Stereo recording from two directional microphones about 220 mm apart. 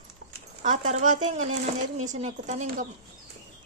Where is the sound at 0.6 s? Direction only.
35° right (ahead or behind).